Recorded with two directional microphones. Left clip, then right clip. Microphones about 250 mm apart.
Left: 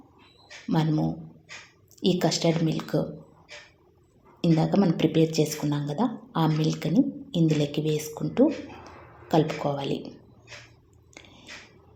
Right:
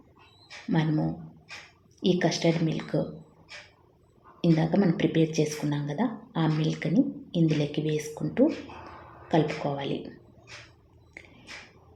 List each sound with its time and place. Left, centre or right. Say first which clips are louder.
2.0 s a woman's voice: left 1 dB; centre
4.4 s a woman's voice: left 1 dB; centre